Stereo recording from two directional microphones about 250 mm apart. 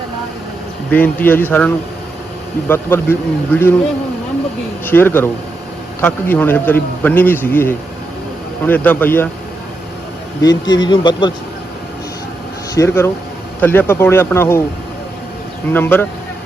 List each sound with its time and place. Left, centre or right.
0.9 s a man's voice: centre
4.9 s a man's voice: centre
10.4 s a man's voice: centre
12.7 s a man's voice: centre
15.7 s a man's voice: centre